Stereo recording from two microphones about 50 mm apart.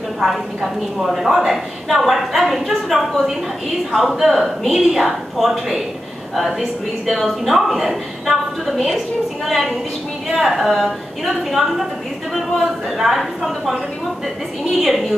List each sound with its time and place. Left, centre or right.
0.2 s a woman's voice: centre